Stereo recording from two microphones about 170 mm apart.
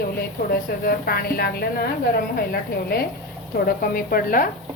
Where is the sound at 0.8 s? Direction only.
65° left (ahead or behind).